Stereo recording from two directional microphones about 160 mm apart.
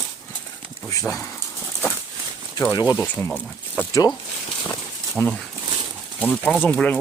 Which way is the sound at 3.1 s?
10° left (ahead or behind).